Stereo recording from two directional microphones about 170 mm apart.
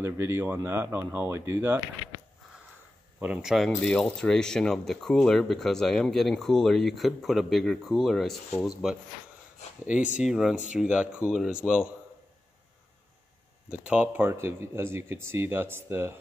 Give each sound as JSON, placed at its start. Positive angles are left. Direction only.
{"t": 0.0, "sound": "speech", "side_deg": -15}
{"t": 3.2, "sound": "speech", "side_deg": -5}
{"t": 10.1, "sound": "speech", "side_deg": -5}
{"t": 13.8, "sound": "speech", "side_deg": -10}